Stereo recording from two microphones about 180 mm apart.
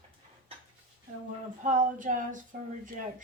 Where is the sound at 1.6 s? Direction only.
45° right (ahead or behind).